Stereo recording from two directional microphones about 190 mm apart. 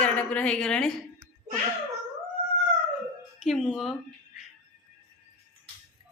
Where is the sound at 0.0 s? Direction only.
5° left (ahead or behind).